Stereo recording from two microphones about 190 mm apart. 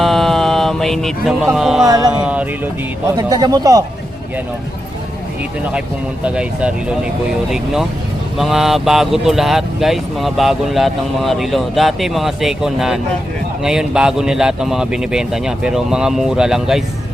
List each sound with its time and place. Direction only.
0.0 s a sound: centre (ahead or behind)
1.5 s speech: centre (ahead or behind)
1.9 s speech: 20° right (ahead or behind)
2.2 s speech: 5° right (ahead or behind)
3.2 s speech: 20° right (ahead or behind)
6.2 s speech: 5° right (ahead or behind)